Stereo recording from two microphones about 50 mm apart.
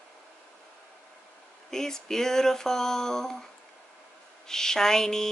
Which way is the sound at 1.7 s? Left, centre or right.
Centre.